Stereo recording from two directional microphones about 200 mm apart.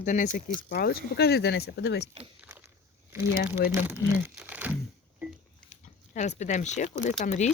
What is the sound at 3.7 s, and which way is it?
Speech, 10° right (ahead or behind).